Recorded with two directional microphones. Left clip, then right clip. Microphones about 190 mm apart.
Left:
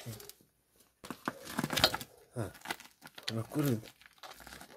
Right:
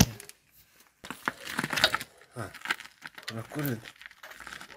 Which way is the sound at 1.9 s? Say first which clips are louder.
Right 6 dB; 45° left (ahead or behind).